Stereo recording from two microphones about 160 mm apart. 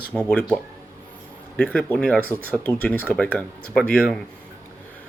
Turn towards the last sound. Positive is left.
turn(degrees=5)  # may be behind; listen again after turning